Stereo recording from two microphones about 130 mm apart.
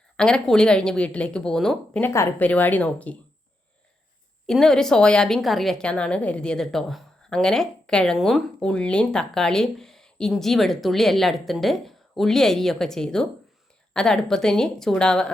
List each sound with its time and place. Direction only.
0.2 s a woman's voice: 5° left (ahead or behind)
2.0 s speech: 20° left (ahead or behind)
4.4 s a woman's voice: 5° left (ahead or behind)